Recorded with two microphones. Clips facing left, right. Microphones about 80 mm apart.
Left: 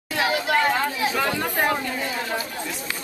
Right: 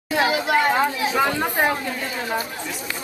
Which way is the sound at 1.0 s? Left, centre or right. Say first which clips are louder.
Right 3 dB; centre.